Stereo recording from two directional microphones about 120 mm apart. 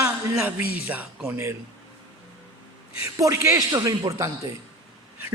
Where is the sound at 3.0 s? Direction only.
25° right (ahead or behind).